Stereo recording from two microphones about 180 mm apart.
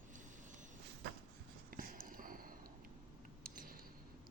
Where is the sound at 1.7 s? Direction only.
50° right (ahead or behind).